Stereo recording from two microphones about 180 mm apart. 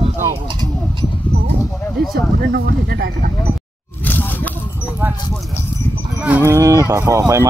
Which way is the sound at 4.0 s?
10° left (ahead or behind).